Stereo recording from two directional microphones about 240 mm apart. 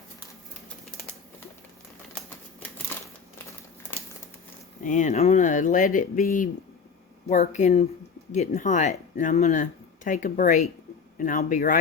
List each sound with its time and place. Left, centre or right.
2.1 s typewriter: centre
4.8 s speech: left